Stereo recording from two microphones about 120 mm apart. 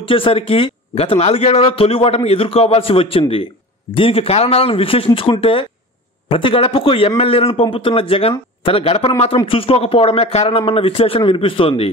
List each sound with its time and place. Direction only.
0.0 s speech: 50° left (ahead or behind)